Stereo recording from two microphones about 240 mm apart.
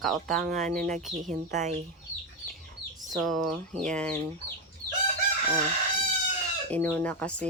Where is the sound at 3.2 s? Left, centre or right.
Centre.